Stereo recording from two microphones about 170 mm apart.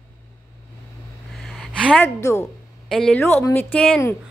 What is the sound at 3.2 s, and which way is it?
Speech, 15° left (ahead or behind).